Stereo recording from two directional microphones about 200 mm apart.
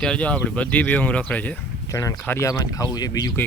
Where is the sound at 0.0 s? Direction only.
5° left (ahead or behind).